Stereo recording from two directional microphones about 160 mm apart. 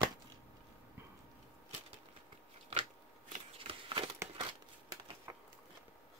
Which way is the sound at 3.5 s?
35° right (ahead or behind).